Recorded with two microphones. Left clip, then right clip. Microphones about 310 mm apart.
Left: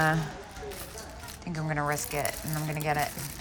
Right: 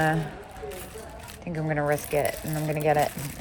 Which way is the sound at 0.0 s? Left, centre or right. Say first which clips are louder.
Right 1 dB; centre.